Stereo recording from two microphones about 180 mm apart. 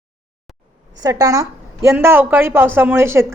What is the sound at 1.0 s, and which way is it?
A woman's voice, 20° right (ahead or behind).